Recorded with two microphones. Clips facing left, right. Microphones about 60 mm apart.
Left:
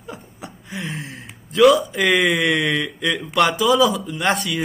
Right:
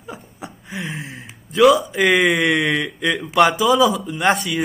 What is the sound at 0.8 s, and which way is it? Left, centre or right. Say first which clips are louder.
Speech: even; centre.